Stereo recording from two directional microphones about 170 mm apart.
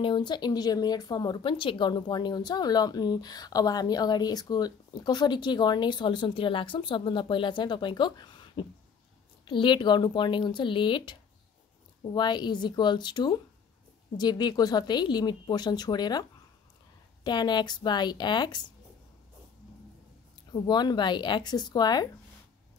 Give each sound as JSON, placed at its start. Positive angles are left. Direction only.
{"t": 0.0, "sound": "speech", "side_deg": 25}
{"t": 20.5, "sound": "speech", "side_deg": 25}